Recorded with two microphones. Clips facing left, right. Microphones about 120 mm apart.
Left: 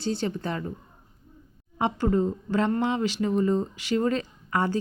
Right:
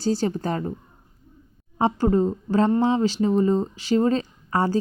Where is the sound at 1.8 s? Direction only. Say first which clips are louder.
Right 4 dB; 35° right (ahead or behind).